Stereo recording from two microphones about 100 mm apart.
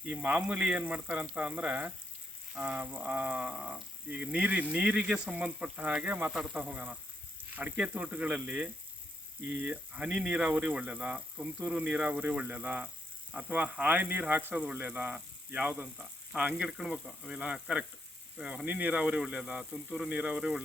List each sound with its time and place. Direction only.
0.0 s speech: 15° right (ahead or behind)
6.3 s speech: centre (ahead or behind)
6.6 s speech: 15° right (ahead or behind)